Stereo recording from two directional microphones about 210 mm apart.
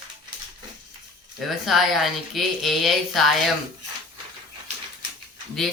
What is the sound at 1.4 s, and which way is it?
Speech, centre (ahead or behind).